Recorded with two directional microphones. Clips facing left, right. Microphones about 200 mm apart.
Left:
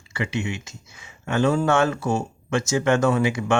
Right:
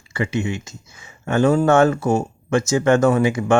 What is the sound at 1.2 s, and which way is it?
Speech, 45° right (ahead or behind).